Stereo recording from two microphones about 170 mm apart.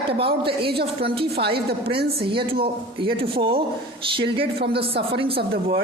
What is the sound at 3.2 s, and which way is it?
A woman's voice, 30° right (ahead or behind).